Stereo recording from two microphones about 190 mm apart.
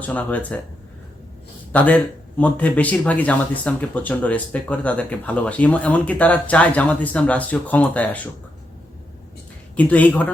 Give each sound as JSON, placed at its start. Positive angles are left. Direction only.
{"t": 0.0, "sound": "speech", "side_deg": 10}
{"t": 1.7, "sound": "speech", "side_deg": 10}
{"t": 9.7, "sound": "speech", "side_deg": 10}